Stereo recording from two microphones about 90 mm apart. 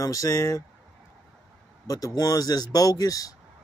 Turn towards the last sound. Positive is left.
turn(degrees=40)  # may be behind; listen again after turning